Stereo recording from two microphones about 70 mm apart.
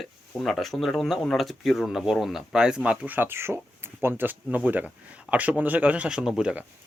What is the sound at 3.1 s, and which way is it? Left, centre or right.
Speech, right.